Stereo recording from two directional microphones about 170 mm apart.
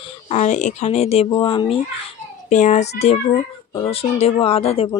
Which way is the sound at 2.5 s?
45° left (ahead or behind).